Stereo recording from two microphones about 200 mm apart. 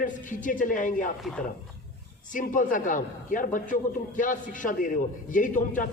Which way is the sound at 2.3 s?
40° left (ahead or behind).